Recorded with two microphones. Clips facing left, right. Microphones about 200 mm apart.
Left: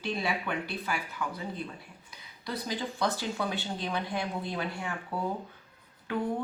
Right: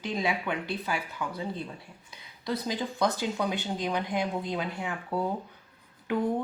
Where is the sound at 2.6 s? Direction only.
20° right (ahead or behind).